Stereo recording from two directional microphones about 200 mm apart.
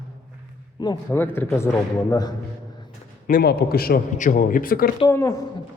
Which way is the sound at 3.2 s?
50° left (ahead or behind).